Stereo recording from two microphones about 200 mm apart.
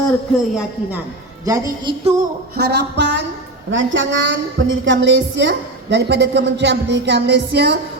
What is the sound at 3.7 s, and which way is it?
A woman's voice, 70° right (ahead or behind).